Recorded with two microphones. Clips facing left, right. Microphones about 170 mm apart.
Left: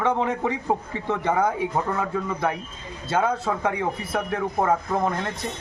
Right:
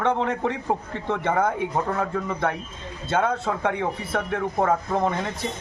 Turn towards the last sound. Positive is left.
turn(degrees=0)  # may be behind; listen again after turning